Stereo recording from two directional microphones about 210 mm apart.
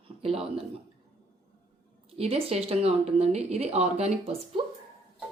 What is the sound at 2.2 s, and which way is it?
Speech, 30° right (ahead or behind).